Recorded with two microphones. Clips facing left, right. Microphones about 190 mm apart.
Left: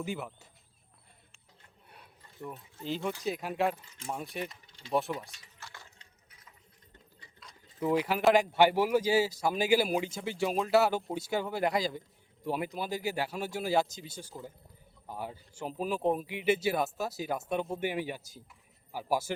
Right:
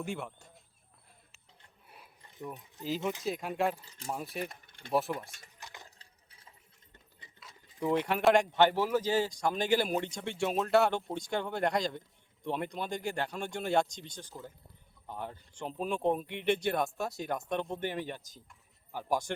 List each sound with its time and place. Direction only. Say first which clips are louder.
0.0 s a man's voice: left 1 dB; centre (ahead or behind)
2.3 s speech: even; 15° right (ahead or behind)
2.8 s a man's voice: even; 5° right (ahead or behind)
3.8 s speech: even; 35° right (ahead or behind)
4.1 s a man's voice: even; centre (ahead or behind)
4.4 s a sound: even; 55° right (ahead or behind)
4.9 s a man's voice: even; centre (ahead or behind)
5.5 s a sound: even; 20° right (ahead or behind)
6.0 s liquid: left 1 dB; 30° right (ahead or behind)
7.3 s a man's voice: left 1 dB; centre (ahead or behind)